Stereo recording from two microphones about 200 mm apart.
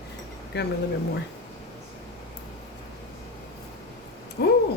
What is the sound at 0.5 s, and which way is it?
Speech, 55° left (ahead or behind).